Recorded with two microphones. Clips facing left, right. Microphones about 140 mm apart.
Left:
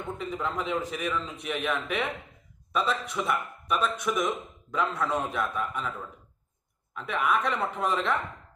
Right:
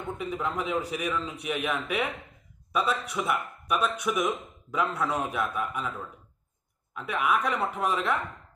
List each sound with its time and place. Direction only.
0.2 s speech: 5° right (ahead or behind)
6.9 s speech: 5° right (ahead or behind)